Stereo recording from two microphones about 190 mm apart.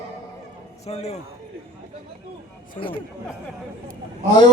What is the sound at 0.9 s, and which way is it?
Speech, 35° left (ahead or behind).